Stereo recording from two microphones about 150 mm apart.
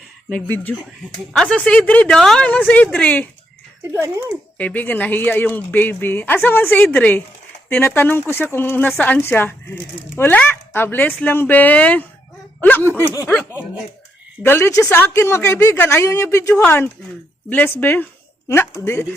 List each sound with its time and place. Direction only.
0.3 s speech: 10° left (ahead or behind)
3.9 s a child's voice: 15° right (ahead or behind)
4.5 s speech: 10° left (ahead or behind)
14.4 s a woman's voice: 15° left (ahead or behind)